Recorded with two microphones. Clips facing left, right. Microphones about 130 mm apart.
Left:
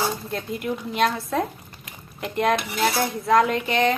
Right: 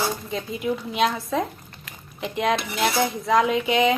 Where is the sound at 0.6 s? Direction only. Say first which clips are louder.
Right 1 dB; centre (ahead or behind).